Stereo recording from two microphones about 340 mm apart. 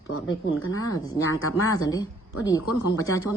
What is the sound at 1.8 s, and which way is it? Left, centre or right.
Speech, centre.